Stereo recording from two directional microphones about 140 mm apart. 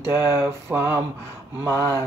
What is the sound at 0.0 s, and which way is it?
Mantra, 20° right (ahead or behind).